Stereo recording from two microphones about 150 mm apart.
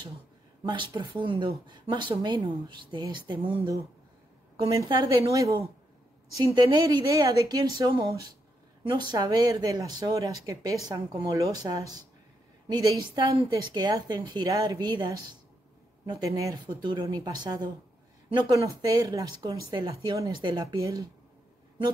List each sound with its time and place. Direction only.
0.7 s speech: 30° right (ahead or behind)
4.7 s speech: 30° right (ahead or behind)